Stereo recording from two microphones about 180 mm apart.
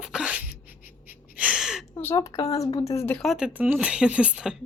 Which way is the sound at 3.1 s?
Centre (ahead or behind).